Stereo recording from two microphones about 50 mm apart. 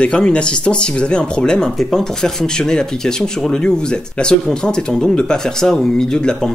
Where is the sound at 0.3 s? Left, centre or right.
Centre.